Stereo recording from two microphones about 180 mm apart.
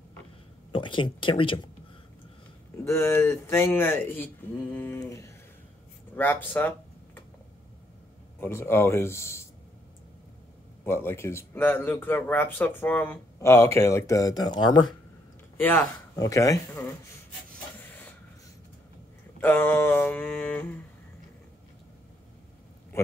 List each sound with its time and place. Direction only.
0.7 s speech: 25° left (ahead or behind)
2.8 s speech: 15° left (ahead or behind)
8.4 s speech: 15° left (ahead or behind)
10.9 s speech: 15° left (ahead or behind)
15.5 s speech: 10° left (ahead or behind)
19.4 s speech: 10° left (ahead or behind)
22.9 s a sound: 15° left (ahead or behind)